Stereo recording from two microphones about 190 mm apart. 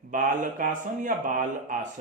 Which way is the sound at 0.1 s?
45° right (ahead or behind).